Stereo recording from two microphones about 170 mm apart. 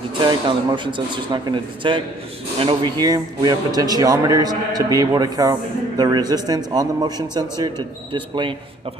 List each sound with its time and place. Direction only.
0.2 s speech: 25° right (ahead or behind)